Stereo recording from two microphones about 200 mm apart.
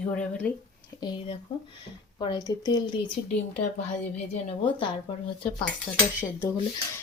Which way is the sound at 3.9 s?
35° left (ahead or behind).